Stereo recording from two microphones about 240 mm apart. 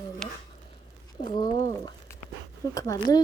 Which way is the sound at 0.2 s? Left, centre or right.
Centre.